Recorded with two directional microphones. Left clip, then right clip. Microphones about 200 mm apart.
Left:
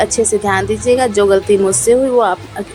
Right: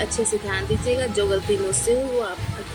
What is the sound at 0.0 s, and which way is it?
A woman's voice, 15° left (ahead or behind).